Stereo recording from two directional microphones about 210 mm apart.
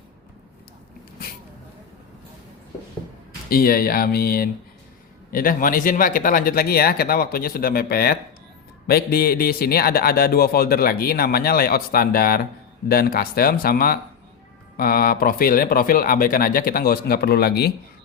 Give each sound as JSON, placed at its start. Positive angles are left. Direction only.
{"t": 3.5, "sound": "a man's voice", "side_deg": 45}